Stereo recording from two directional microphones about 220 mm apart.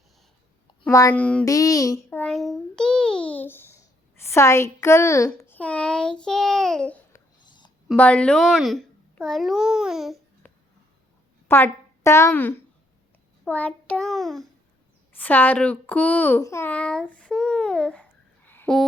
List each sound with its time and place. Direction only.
0.8 s a child's voice: 15° left (ahead or behind)
7.4 s a sound: 20° left (ahead or behind)
7.9 s a child's voice: 5° left (ahead or behind)
11.4 s a woman's voice: 10° left (ahead or behind)
13.4 s child singing: 5° left (ahead or behind)
15.1 s a child's voice: 10° left (ahead or behind)
18.4 s a sound: 10° left (ahead or behind)